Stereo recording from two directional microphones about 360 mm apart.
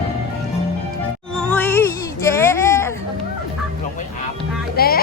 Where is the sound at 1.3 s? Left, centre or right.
Centre.